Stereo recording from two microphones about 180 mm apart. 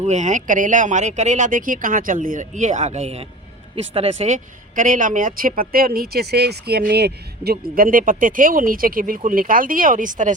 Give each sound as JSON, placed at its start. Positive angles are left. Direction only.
{"t": 0.0, "sound": "speech", "side_deg": -40}